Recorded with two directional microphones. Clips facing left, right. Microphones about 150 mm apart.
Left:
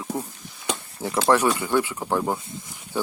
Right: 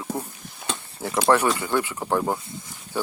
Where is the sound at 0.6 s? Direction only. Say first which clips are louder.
Left 2 dB; 15° left (ahead or behind).